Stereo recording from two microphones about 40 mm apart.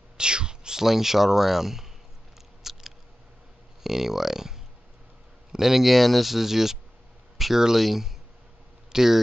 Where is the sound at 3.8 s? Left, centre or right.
Centre.